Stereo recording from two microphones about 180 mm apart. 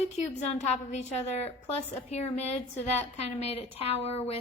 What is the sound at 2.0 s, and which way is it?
A woman's voice, 35° left (ahead or behind).